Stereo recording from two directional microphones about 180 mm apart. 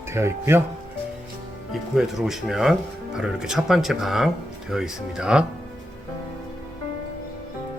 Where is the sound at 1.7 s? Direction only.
Centre (ahead or behind).